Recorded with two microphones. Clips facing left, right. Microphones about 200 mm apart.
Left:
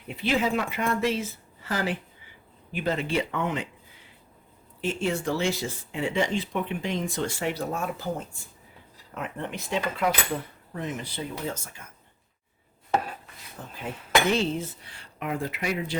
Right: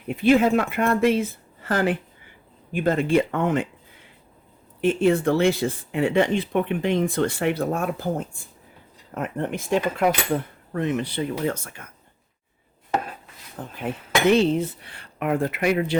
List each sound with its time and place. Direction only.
0.1 s speech: 50° right (ahead or behind)
4.8 s speech: 60° right (ahead or behind)
9.1 s speech: 50° right (ahead or behind)
10.7 s speech: 65° right (ahead or behind)
13.8 s speech: 60° right (ahead or behind)